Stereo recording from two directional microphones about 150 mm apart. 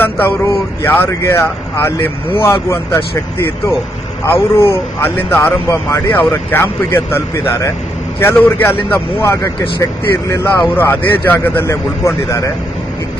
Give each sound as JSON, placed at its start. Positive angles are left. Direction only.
{"t": 0.0, "sound": "speech", "side_deg": 15}